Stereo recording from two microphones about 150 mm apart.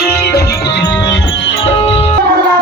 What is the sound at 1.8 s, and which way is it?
Music, 40° left (ahead or behind).